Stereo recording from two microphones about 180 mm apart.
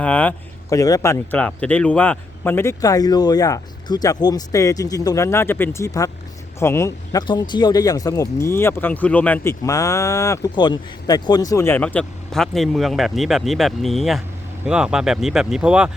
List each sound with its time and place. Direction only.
0.0 s speech: 5° left (ahead or behind)